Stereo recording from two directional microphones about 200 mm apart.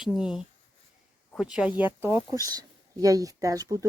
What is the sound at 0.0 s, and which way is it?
Speech, centre (ahead or behind).